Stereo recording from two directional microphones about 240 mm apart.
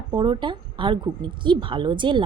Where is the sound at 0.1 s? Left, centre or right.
Centre.